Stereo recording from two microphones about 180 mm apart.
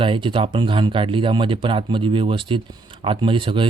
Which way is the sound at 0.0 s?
30° right (ahead or behind).